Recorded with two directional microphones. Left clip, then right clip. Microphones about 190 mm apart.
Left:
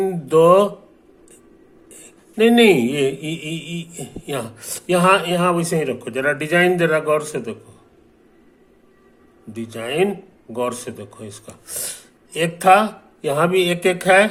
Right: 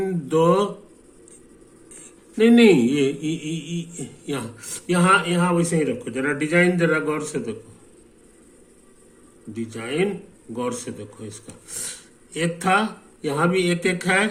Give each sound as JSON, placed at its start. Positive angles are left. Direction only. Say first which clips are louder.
{"t": 0.0, "sound": "mantra", "louder": "left 6 dB", "side_deg": 25}
{"t": 2.4, "sound": "speech", "louder": "left 2 dB", "side_deg": 25}
{"t": 9.5, "sound": "speech", "louder": "left 3 dB", "side_deg": 30}